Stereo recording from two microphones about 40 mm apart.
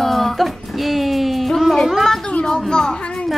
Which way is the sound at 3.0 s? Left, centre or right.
Left.